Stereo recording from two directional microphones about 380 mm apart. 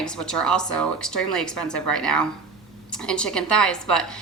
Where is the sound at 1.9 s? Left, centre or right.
Left.